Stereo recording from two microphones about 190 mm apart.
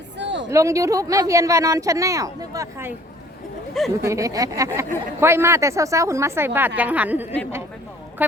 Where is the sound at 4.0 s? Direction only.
15° right (ahead or behind).